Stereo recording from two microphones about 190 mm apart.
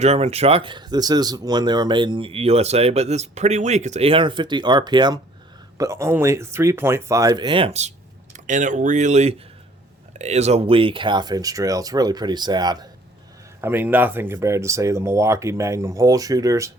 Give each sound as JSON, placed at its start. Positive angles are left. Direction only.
{"t": 0.0, "sound": "speech", "side_deg": -35}